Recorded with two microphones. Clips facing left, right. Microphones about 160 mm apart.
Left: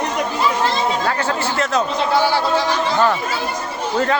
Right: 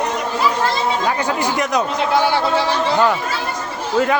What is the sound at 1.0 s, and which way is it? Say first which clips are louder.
Speech: right 1 dB; 15° right (ahead or behind).